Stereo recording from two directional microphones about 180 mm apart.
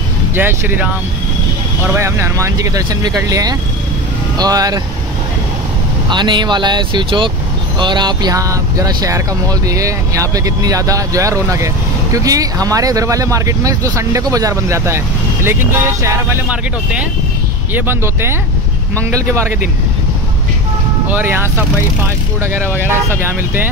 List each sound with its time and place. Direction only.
0.4 s speech: 10° right (ahead or behind)
2.0 s speech: 15° right (ahead or behind)
6.0 s speech: 25° right (ahead or behind)
17.7 s speech: 10° right (ahead or behind)
21.1 s speech: 10° right (ahead or behind)